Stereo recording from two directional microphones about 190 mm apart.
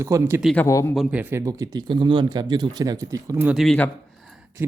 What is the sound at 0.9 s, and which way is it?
A man's voice, 10° right (ahead or behind).